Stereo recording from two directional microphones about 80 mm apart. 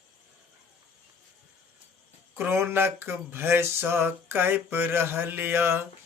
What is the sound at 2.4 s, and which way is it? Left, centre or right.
Speech, right.